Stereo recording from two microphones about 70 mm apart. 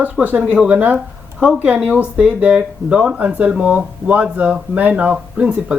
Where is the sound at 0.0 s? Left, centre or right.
Right.